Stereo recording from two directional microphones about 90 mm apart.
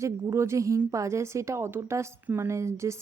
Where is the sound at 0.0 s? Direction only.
30° right (ahead or behind).